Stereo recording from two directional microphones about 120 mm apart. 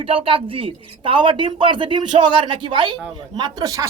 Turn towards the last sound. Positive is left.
turn(degrees=-30)  # may be behind; listen again after turning